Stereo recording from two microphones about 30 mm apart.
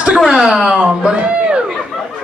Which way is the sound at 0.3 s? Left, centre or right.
Centre.